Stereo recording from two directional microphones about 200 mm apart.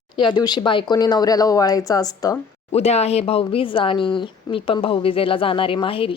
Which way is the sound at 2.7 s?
30° left (ahead or behind).